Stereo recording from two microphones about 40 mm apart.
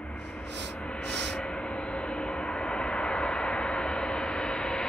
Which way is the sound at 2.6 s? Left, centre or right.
Left.